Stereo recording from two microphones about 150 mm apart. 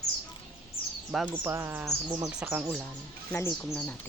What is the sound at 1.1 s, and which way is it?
Speech, centre (ahead or behind).